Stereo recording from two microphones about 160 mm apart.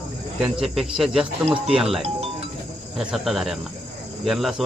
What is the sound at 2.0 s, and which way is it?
Music, 40° right (ahead or behind).